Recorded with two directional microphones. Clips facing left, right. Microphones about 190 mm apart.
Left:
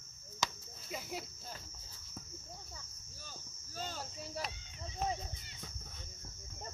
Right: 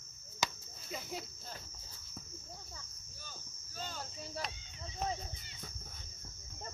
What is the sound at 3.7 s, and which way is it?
Speech, 35° left (ahead or behind).